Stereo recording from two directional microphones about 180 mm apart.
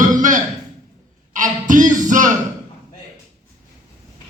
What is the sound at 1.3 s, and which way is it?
Music, 45° right (ahead or behind).